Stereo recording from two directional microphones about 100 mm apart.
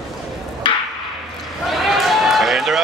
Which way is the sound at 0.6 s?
55° left (ahead or behind).